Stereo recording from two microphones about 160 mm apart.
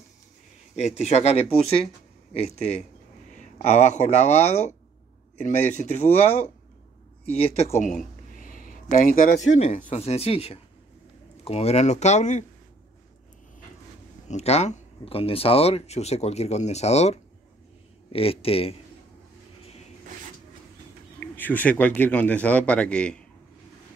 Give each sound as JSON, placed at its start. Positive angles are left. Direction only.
{"t": 0.7, "sound": "speech", "side_deg": 40}
{"t": 8.4, "sound": "a sound", "side_deg": 60}
{"t": 9.8, "sound": "speech", "side_deg": 40}
{"t": 14.2, "sound": "speech", "side_deg": 45}
{"t": 21.2, "sound": "speech", "side_deg": 10}